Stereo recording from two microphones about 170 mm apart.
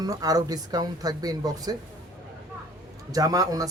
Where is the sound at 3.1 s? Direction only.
20° right (ahead or behind).